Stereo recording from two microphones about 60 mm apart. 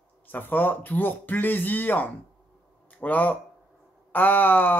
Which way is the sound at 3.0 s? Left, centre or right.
Left.